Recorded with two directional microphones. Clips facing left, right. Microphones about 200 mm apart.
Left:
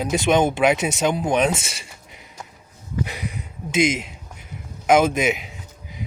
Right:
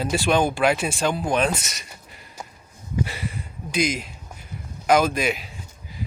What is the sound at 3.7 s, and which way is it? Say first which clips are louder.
Speech: left 4 dB; 25° left (ahead or behind).